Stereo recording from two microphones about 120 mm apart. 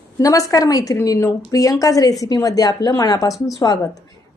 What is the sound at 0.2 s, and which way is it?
A woman's voice, 30° left (ahead or behind).